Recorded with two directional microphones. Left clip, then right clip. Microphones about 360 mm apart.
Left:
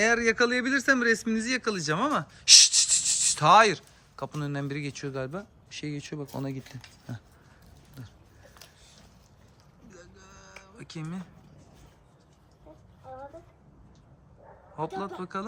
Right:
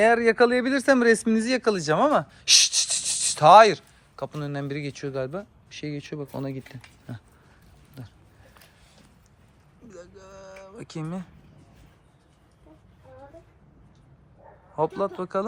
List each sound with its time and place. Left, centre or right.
0.0 s speech: centre
8.0 s a man's voice: centre
9.9 s a sound: centre
14.8 s a man's voice: centre